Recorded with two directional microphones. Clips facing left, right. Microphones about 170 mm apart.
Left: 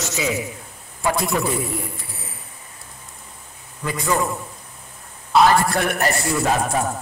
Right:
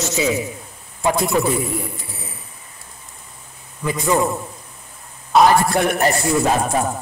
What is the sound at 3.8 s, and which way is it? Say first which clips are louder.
Speech: right 4 dB; 20° right (ahead or behind).